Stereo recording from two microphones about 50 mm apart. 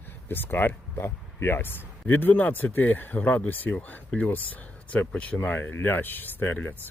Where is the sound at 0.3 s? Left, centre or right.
Left.